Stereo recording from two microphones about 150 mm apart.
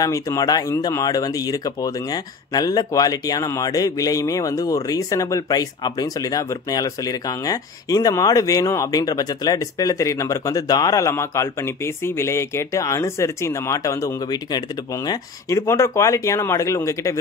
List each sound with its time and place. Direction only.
0.0 s speech: 20° left (ahead or behind)